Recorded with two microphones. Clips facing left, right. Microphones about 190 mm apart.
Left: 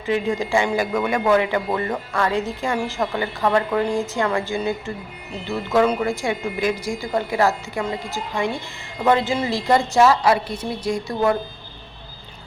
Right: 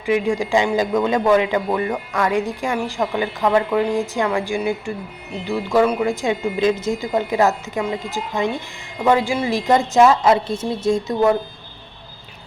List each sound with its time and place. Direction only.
0.0 s speech: 15° right (ahead or behind)